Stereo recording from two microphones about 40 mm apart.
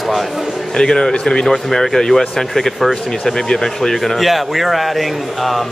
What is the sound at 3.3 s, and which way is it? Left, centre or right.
Speech, centre.